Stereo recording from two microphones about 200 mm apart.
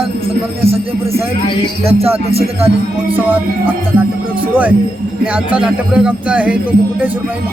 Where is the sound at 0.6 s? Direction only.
30° right (ahead or behind).